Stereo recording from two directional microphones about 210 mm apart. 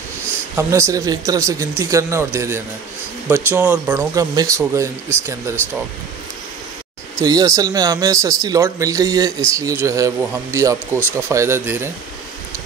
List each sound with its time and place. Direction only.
0.6 s speech: 15° right (ahead or behind)
7.2 s speech: 15° right (ahead or behind)